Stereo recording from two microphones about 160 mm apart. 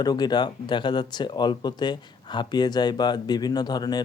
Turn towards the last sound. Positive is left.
turn(degrees=25)  # may be behind; listen again after turning